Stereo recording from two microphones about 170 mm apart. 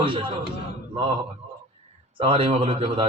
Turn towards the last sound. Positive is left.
turn(degrees=-35)  # may be behind; listen again after turning